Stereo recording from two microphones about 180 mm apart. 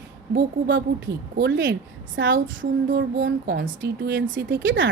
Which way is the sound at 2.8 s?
50° right (ahead or behind).